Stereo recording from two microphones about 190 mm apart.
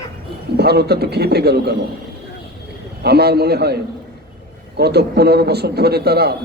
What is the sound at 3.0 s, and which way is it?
Speech, 55° right (ahead or behind).